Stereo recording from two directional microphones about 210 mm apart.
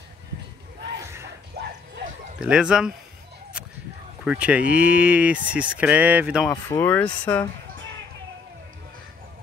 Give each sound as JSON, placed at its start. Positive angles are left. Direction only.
{"t": 1.0, "sound": "a sound", "side_deg": -15}
{"t": 1.6, "sound": "bow-wow", "side_deg": -50}
{"t": 2.3, "sound": "speech", "side_deg": -5}
{"t": 4.2, "sound": "speech", "side_deg": -5}
{"t": 6.5, "sound": "speech", "side_deg": 10}